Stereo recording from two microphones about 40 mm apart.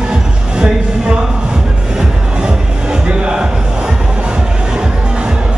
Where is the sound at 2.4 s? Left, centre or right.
Centre.